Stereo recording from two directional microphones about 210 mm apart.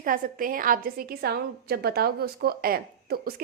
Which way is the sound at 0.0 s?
40° right (ahead or behind).